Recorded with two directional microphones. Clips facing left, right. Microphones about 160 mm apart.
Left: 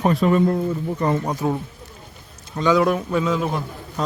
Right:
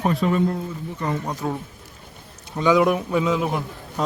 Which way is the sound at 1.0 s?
35° left (ahead or behind).